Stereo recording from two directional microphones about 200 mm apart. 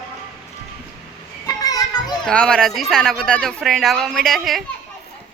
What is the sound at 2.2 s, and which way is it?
A man's voice, 5° left (ahead or behind).